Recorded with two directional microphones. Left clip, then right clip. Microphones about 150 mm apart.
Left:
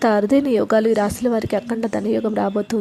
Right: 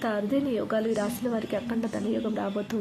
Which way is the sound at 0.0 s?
50° left (ahead or behind).